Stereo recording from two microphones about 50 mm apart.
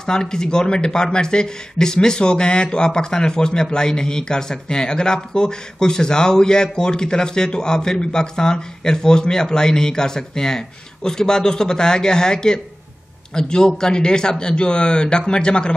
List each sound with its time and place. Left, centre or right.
0.0 s speech: centre